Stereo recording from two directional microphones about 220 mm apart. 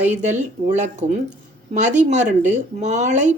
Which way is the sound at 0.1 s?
30° right (ahead or behind).